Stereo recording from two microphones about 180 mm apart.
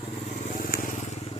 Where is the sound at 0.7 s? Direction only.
50° left (ahead or behind).